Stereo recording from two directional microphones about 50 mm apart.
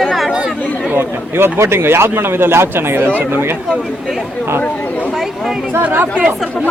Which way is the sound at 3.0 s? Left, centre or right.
Right.